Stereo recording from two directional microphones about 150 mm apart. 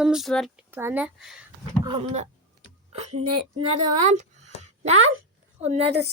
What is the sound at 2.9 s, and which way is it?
A woman's voice, 45° right (ahead or behind).